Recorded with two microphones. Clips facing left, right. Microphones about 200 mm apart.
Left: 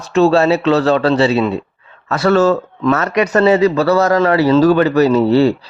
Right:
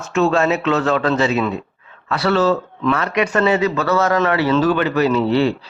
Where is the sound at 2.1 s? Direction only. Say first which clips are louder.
Left 4 dB; 45° left (ahead or behind).